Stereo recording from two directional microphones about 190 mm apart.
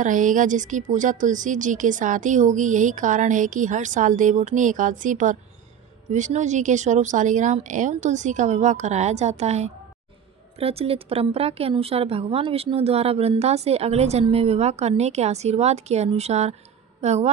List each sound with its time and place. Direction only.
0.0 s a woman's voice: 45° right (ahead or behind)